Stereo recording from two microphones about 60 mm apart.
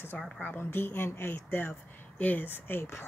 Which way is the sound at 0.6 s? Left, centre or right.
Left.